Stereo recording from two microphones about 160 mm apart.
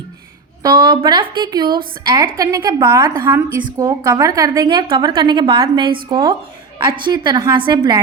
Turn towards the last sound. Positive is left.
turn(degrees=-30)  # may be behind; listen again after turning